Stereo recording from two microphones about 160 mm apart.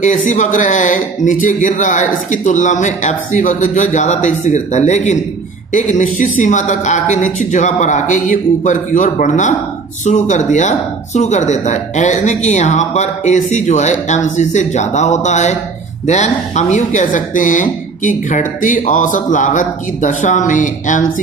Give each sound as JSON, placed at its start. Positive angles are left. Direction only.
{"t": 0.0, "sound": "speech", "side_deg": 50}